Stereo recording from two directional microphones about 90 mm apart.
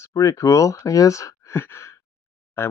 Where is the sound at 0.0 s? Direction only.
40° left (ahead or behind).